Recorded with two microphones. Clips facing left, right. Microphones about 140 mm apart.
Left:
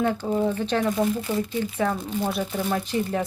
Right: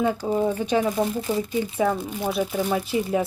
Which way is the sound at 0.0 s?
10° right (ahead or behind).